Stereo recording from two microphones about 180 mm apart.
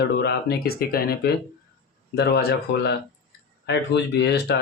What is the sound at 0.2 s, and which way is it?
Speech, 65° left (ahead or behind).